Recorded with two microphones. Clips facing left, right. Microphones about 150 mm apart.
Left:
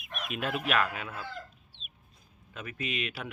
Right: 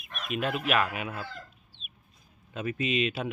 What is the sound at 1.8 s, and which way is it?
Chicken, 30° left (ahead or behind).